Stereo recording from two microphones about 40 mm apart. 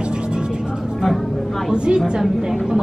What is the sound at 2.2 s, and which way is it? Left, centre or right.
Speech, centre.